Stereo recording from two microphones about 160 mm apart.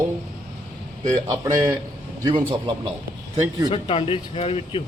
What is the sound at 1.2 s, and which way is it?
Speech, 20° right (ahead or behind).